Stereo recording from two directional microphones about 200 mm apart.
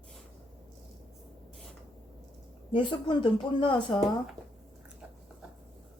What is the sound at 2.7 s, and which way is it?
A woman's voice, 25° left (ahead or behind).